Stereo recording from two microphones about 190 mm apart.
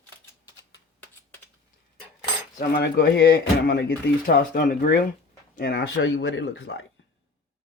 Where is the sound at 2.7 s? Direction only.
60° left (ahead or behind).